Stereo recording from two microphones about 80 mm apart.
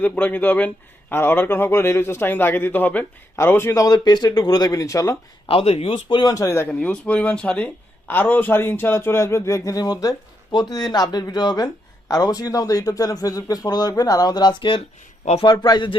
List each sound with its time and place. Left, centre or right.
0.0 s a man's voice: left
3.8 s a man's voice: left
6.1 s a man's voice: left
6.7 s a man's voice: centre; by 16.0 s left